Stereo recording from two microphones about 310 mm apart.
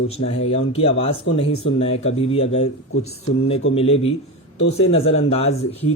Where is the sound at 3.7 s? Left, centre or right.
Centre.